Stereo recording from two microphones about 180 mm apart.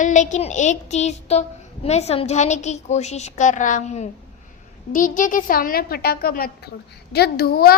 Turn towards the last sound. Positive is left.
turn(degrees=60)  # may be behind; listen again after turning